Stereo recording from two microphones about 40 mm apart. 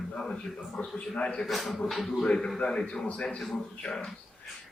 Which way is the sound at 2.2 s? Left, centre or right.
Left.